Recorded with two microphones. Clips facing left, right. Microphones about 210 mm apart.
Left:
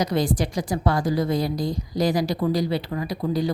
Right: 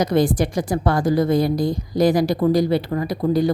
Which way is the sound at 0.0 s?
55° right (ahead or behind).